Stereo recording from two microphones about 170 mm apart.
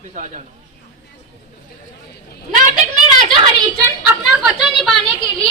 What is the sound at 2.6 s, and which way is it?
Speech, 50° right (ahead or behind).